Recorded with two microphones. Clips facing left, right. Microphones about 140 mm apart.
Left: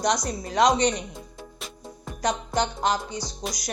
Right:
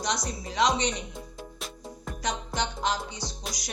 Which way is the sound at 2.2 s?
40° left (ahead or behind).